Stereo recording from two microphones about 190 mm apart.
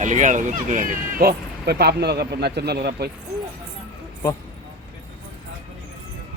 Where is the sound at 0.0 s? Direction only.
40° right (ahead or behind); by 3.1 s 60° right (ahead or behind).